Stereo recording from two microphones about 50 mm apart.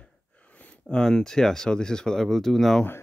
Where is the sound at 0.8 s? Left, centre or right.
Centre.